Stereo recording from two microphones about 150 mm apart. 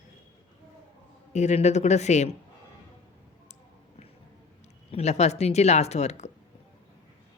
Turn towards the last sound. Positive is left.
turn(degrees=50)  # may be behind; listen again after turning